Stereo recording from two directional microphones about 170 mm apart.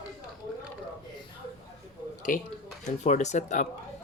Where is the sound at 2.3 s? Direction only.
55° left (ahead or behind).